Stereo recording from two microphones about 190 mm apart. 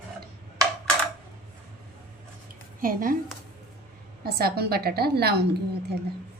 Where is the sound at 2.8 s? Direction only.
45° right (ahead or behind).